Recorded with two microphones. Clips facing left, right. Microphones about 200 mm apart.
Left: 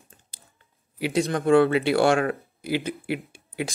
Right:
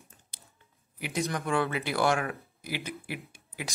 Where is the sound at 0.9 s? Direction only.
90° left.